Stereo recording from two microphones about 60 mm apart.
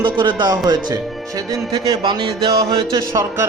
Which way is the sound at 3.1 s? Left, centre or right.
Right.